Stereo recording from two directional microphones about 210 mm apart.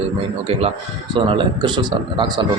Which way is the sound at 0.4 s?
30° right (ahead or behind).